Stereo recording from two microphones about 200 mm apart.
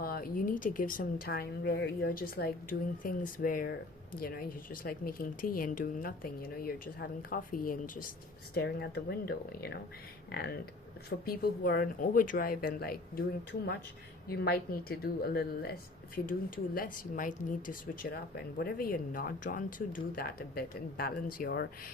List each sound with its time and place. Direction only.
0.0 s speech: 45° left (ahead or behind)
11.3 s speech: 50° left (ahead or behind)
16.7 s speech: 45° left (ahead or behind)